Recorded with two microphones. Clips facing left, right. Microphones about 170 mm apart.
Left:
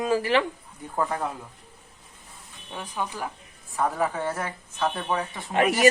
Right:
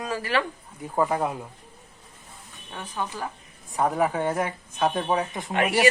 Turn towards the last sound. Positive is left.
turn(degrees=35)  # may be behind; listen again after turning